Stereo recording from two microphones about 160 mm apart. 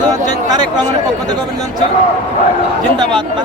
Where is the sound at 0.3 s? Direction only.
25° right (ahead or behind).